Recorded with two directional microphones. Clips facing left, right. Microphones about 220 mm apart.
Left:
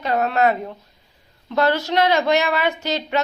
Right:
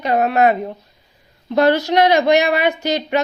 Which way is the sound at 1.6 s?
15° right (ahead or behind).